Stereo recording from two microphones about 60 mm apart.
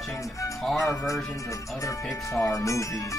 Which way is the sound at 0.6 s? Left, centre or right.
Centre.